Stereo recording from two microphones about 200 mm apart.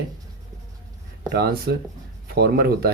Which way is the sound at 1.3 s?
50° right (ahead or behind).